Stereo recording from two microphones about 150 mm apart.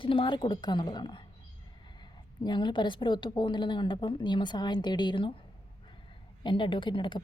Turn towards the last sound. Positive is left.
turn(degrees=30)  # may be behind; listen again after turning